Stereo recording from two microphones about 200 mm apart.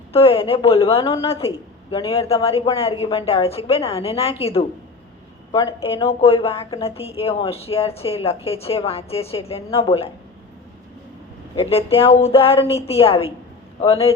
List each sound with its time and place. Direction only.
0.1 s a woman's voice: 30° left (ahead or behind)
11.5 s a woman's voice: 30° left (ahead or behind)